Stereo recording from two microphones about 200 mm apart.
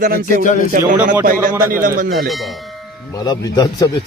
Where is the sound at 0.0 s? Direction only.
45° right (ahead or behind).